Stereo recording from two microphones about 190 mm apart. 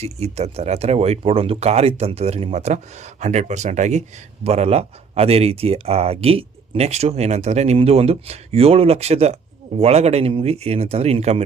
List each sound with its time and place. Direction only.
0.0 s speech: 35° right (ahead or behind)